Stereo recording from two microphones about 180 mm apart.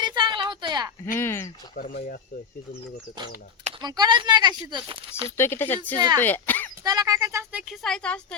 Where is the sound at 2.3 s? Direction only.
50° left (ahead or behind).